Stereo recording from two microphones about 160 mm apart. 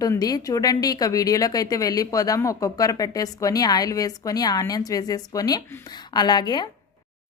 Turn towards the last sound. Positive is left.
turn(degrees=25)  # may be behind; listen again after turning